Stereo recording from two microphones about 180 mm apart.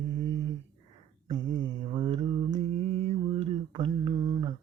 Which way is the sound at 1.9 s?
30° right (ahead or behind).